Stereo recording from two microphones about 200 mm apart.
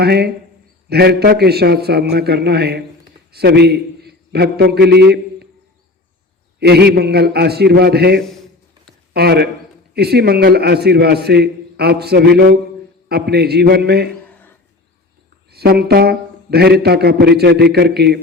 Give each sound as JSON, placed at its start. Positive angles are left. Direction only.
{"t": 0.0, "sound": "a man's voice", "side_deg": -55}
{"t": 6.6, "sound": "a man's voice", "side_deg": -55}
{"t": 15.4, "sound": "a man's voice", "side_deg": -50}